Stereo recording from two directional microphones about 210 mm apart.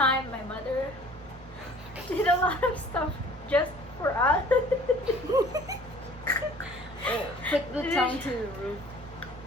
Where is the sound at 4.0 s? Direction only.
10° left (ahead or behind).